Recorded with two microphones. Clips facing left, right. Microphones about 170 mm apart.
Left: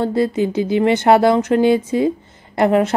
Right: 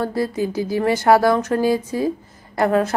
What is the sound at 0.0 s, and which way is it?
Speech, 25° left (ahead or behind).